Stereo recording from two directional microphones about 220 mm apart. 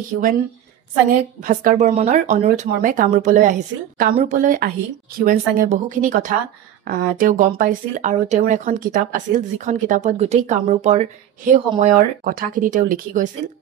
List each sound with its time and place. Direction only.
1.4 s speech: 40° right (ahead or behind)